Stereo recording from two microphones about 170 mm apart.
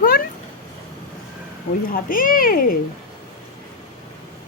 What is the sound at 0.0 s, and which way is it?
Cat, 60° left (ahead or behind).